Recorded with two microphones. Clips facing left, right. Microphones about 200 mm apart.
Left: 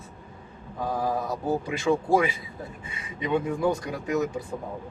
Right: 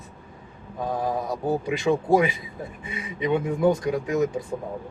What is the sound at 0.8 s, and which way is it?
Speech, 20° right (ahead or behind).